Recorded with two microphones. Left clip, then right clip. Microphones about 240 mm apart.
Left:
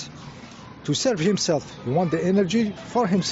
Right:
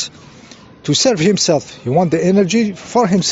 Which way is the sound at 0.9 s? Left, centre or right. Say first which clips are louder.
Right 9 dB; right.